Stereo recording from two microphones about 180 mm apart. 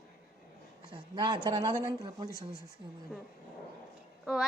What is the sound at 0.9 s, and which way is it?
Speech, 25° right (ahead or behind).